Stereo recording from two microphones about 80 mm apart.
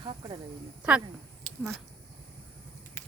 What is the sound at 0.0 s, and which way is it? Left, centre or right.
Speech, right.